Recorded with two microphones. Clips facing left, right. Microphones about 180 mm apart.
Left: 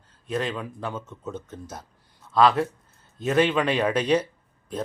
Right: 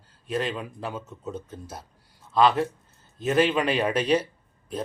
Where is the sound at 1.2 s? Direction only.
30° right (ahead or behind).